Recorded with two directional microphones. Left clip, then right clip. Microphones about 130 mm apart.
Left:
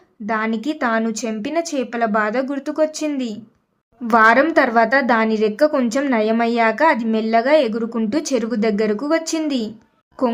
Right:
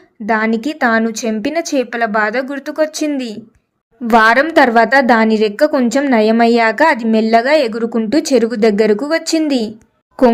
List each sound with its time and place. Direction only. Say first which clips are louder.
0.3 s a woman's voice: right 6 dB; 30° right (ahead or behind)